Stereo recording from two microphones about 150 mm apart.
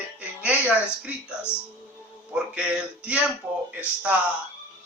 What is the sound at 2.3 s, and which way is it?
Speech, 5° right (ahead or behind).